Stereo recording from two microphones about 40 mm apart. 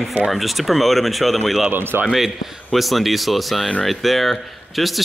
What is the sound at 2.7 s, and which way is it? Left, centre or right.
Speech, centre.